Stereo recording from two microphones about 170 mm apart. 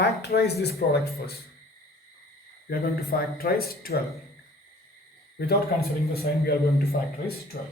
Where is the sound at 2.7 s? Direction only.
60° left (ahead or behind).